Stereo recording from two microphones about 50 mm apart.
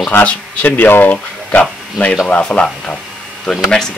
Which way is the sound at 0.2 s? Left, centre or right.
Left.